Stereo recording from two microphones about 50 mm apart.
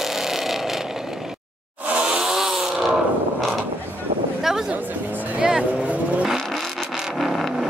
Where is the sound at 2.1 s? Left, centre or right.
Centre.